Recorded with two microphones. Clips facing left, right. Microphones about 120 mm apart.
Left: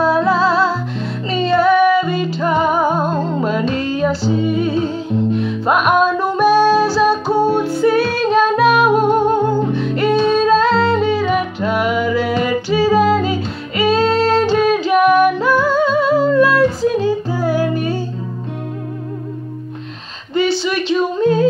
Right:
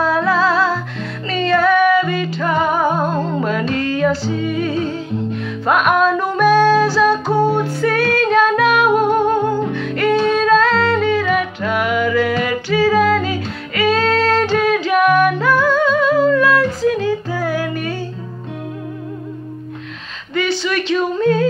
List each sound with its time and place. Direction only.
0.0 s music: 25° left (ahead or behind)
2.6 s music: 10° left (ahead or behind)
6.5 s music: 10° left (ahead or behind)
7.5 s female singing: 5° left (ahead or behind)
7.8 s female singing: 25° left (ahead or behind)
8.1 s female singing: 10° left (ahead or behind)
8.4 s music: 25° left (ahead or behind)
14.8 s female singing: 25° left (ahead or behind)
15.1 s music: 15° left (ahead or behind)
15.9 s music: 30° left (ahead or behind)
20.9 s yodeling: 20° left (ahead or behind)